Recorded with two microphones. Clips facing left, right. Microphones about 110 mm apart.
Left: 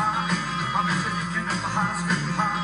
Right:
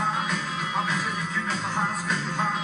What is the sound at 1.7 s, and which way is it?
Music, centre (ahead or behind).